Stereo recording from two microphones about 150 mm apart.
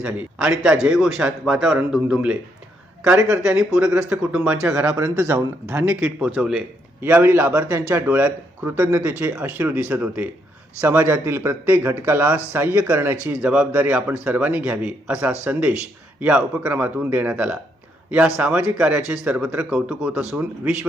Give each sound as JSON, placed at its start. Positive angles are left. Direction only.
{"t": 0.0, "sound": "a man's voice", "side_deg": -5}
{"t": 3.2, "sound": "speech", "side_deg": -20}
{"t": 3.4, "sound": "a man's voice", "side_deg": -5}
{"t": 4.7, "sound": "a man's voice", "side_deg": -20}
{"t": 7.0, "sound": "a man's voice", "side_deg": -15}